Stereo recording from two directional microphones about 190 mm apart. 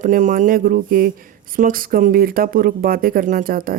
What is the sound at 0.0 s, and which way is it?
Speech, 40° right (ahead or behind).